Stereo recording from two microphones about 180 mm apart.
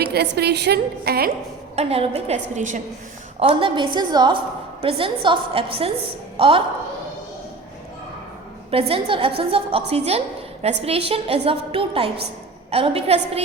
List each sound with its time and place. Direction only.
0.0 s a woman's voice: 65° right (ahead or behind)
1.7 s a woman's voice: 35° right (ahead or behind)
3.4 s a woman's voice: 30° right (ahead or behind)
8.7 s a woman's voice: 30° right (ahead or behind)